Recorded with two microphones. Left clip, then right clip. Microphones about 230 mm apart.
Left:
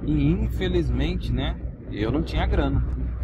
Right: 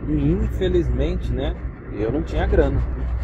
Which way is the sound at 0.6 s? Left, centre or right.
Left.